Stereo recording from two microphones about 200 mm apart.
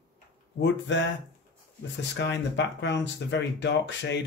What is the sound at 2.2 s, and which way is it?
Speech, 60° left (ahead or behind).